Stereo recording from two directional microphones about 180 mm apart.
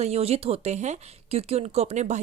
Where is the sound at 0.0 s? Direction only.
35° right (ahead or behind).